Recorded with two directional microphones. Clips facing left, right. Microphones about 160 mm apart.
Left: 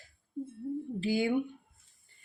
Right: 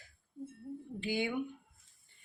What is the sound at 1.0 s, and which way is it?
Speech, 35° left (ahead or behind).